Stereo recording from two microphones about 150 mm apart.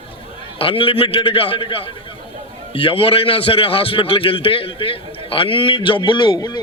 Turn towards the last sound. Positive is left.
turn(degrees=30)  # may be behind; listen again after turning